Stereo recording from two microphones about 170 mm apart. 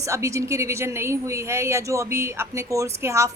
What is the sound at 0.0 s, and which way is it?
A woman's voice, 20° right (ahead or behind).